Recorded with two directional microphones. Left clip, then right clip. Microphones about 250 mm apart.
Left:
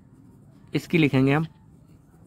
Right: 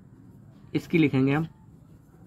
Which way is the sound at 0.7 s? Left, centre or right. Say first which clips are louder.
Left 2 dB; left.